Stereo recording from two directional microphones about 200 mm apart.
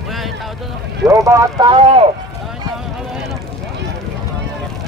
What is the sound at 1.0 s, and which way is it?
Speech, 15° right (ahead or behind).